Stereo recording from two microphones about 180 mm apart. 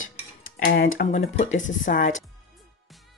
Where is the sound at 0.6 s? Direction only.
60° left (ahead or behind).